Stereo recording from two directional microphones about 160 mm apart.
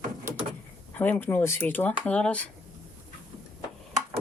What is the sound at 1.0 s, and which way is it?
Speech, 10° left (ahead or behind).